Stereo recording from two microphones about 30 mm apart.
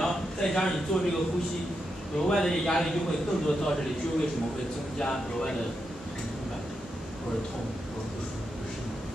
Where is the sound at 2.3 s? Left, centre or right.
Centre.